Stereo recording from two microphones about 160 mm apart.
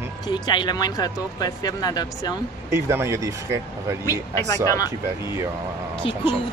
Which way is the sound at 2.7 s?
15° right (ahead or behind).